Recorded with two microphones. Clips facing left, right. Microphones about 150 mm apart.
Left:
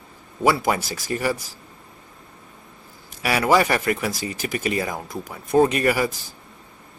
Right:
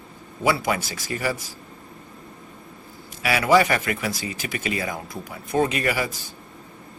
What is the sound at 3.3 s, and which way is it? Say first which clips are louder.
Speech: even; 40° left (ahead or behind).